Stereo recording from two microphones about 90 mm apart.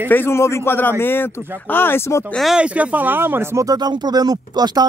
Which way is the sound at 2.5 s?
15° right (ahead or behind).